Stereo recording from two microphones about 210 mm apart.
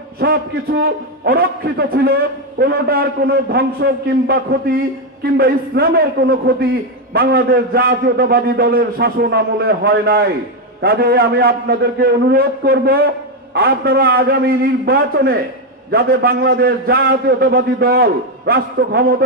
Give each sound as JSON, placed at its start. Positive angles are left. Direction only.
{"t": 0.2, "sound": "a man's voice", "side_deg": -50}